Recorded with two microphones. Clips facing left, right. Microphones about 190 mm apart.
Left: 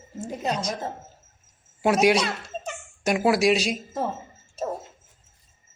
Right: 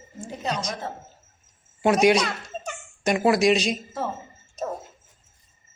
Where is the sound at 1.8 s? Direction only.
5° left (ahead or behind).